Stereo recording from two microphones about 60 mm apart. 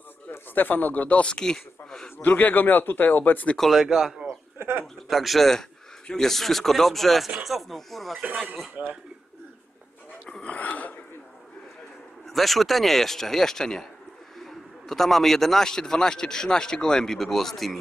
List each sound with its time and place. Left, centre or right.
0.6 s speech: left; by 2.1 s centre
2.2 s speech: left
3.5 s speech: centre
3.8 s speech: centre
4.6 s a sound: right
5.0 s speech: centre
8.8 s speech: right
10.4 s a sound: left
12.3 s a man's voice: centre